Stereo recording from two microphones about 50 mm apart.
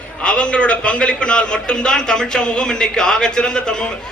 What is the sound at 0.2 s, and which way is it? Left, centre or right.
A man's voice, left.